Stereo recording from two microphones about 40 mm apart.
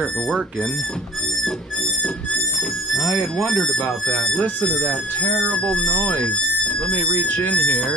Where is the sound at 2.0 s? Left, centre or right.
Left.